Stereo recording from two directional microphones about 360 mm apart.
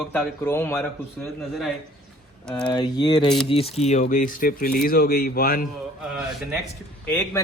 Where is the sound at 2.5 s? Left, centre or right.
Centre; by 5.6 s left.